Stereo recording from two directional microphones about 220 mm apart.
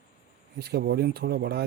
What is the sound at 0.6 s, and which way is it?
Speech, 45° right (ahead or behind).